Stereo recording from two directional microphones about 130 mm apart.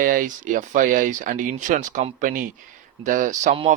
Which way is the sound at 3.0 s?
75° right (ahead or behind).